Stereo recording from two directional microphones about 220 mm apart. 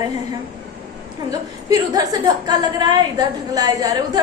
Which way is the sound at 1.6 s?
15° right (ahead or behind).